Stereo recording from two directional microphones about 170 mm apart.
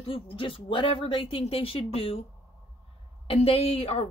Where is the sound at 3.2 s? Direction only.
35° left (ahead or behind).